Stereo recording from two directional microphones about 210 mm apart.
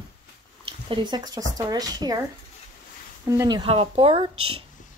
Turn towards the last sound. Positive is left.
turn(degrees=-90)